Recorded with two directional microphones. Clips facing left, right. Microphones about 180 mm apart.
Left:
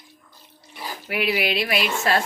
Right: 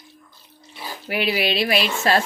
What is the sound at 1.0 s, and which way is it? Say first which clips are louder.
Speech: right 1 dB; 30° right (ahead or behind).